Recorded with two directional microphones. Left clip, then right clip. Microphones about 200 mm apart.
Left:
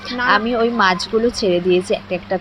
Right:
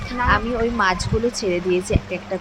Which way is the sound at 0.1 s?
20° left (ahead or behind).